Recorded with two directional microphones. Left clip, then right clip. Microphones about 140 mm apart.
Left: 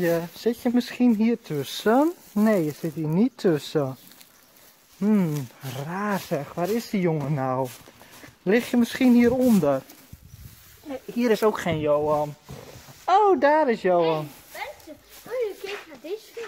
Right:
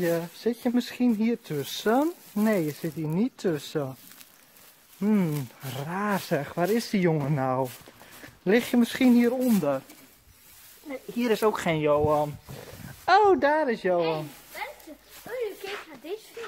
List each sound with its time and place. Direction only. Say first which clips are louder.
0.0 s speech: left 3 dB; 15° left (ahead or behind)
0.8 s speech: left 4 dB; 30° left (ahead or behind)
3.2 s speech: left 6 dB; 30° left (ahead or behind)
5.0 s speech: left 2 dB; 10° left (ahead or behind)
9.2 s speech: left 4 dB; 25° left (ahead or behind)
10.9 s speech: left 4 dB; 10° left (ahead or behind)
11.7 s speech: left 1 dB; 20° right (ahead or behind)
13.0 s speech: left 1 dB; 10° right (ahead or behind)
13.4 s speech: left 4 dB; 40° left (ahead or behind)
15.3 s a sound: left 4 dB; 45° right (ahead or behind)
16.4 s a sound: left 3 dB; centre (ahead or behind)